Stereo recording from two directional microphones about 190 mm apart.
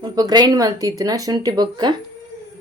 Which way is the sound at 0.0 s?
20° right (ahead or behind).